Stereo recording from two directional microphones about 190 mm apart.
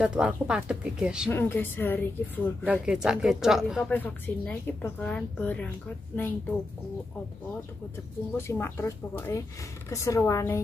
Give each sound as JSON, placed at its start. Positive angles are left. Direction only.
{"t": 0.0, "sound": "speech", "side_deg": -5}
{"t": 1.3, "sound": "a woman's voice", "side_deg": 10}
{"t": 2.6, "sound": "speech", "side_deg": -5}
{"t": 3.9, "sound": "a woman's voice", "side_deg": 10}
{"t": 8.4, "sound": "a woman's voice", "side_deg": 15}